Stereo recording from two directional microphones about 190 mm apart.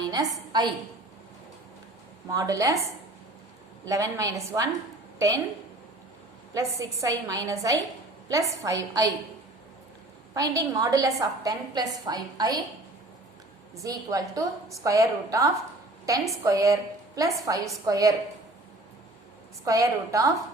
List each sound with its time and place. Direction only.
0.1 s a woman's voice: 20° right (ahead or behind)
2.3 s a woman's voice: 15° right (ahead or behind)
3.8 s a woman's voice: 15° right (ahead or behind)
6.5 s a woman's voice: 15° right (ahead or behind)
10.3 s a woman's voice: 20° right (ahead or behind)
13.8 s a woman's voice: 15° right (ahead or behind)
19.6 s a woman's voice: 15° right (ahead or behind)